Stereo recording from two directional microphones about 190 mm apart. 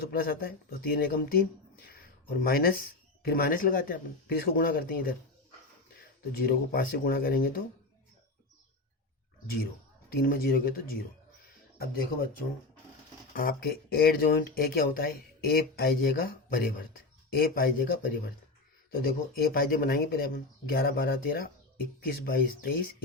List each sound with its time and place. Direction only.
0.0 s speech: 50° left (ahead or behind)
10.2 s speech: 50° left (ahead or behind)
13.3 s speech: 50° left (ahead or behind)